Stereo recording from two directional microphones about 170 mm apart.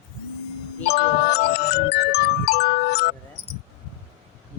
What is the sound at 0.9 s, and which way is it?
Music, 70° left (ahead or behind).